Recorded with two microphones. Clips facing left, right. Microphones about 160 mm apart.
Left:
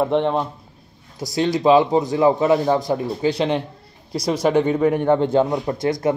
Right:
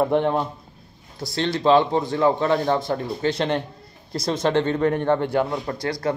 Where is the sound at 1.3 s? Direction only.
15° left (ahead or behind).